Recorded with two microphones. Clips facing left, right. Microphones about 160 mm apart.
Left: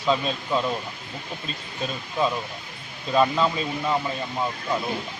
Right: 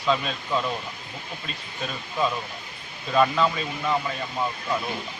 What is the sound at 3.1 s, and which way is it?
Speech, 20° left (ahead or behind).